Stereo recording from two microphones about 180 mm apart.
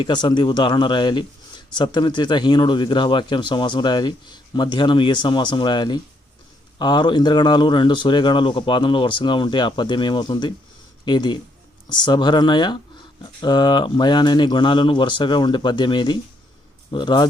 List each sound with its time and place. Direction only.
0.0 s speech: 25° left (ahead or behind)